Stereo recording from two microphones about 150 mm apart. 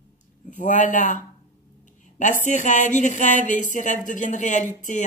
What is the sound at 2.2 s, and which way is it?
Speech, 55° left (ahead or behind).